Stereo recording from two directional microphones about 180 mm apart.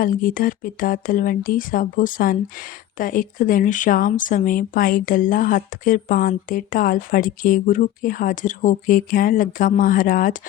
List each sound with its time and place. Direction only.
0.0 s speech: 50° left (ahead or behind)